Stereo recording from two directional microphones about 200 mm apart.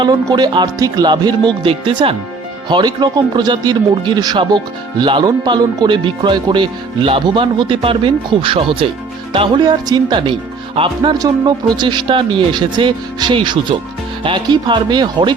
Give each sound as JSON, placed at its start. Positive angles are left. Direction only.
{"t": 0.0, "sound": "speech", "side_deg": -20}